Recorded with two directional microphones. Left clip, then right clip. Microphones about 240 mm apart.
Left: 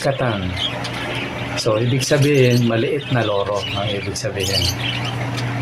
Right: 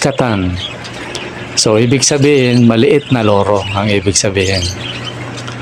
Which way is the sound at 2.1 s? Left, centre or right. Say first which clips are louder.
Right 1 dB; right.